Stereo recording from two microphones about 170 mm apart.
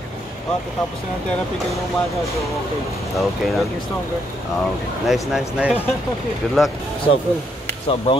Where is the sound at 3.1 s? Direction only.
Centre (ahead or behind).